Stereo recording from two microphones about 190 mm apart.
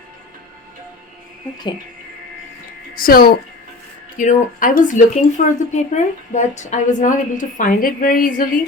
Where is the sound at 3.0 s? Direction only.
50° left (ahead or behind).